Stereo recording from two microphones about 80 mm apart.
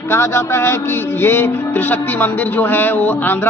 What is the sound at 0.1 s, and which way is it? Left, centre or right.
Music, left.